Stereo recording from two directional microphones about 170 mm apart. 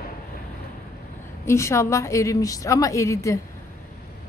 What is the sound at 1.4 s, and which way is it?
A woman's voice, 15° left (ahead or behind).